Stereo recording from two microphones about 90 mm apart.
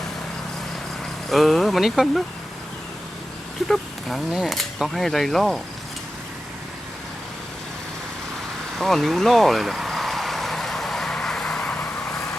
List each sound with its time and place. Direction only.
1.3 s speech: centre (ahead or behind)
3.7 s speech: 5° right (ahead or behind)
8.8 s vehicle: 5° left (ahead or behind)